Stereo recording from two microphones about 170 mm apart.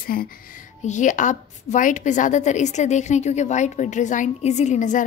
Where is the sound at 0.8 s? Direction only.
45° left (ahead or behind).